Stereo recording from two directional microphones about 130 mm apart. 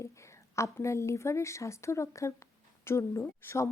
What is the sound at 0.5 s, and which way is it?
A woman's voice, 20° left (ahead or behind).